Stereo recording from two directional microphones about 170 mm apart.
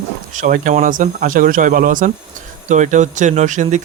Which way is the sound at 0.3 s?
50° right (ahead or behind).